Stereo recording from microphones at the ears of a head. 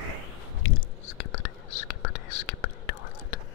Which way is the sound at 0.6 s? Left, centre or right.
Left.